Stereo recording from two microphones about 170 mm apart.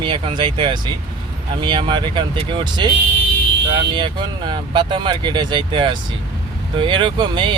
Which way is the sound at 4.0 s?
25° right (ahead or behind).